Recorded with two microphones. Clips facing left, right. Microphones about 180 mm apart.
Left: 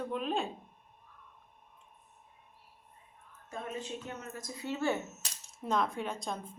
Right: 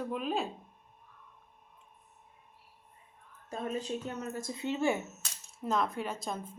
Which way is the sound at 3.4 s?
35° right (ahead or behind).